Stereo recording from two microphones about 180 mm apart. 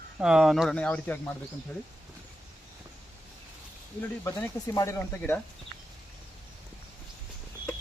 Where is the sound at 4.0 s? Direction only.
15° left (ahead or behind).